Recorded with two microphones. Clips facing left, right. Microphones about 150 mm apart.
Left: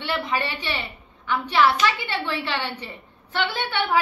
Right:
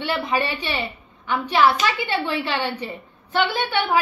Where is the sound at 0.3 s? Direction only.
15° right (ahead or behind).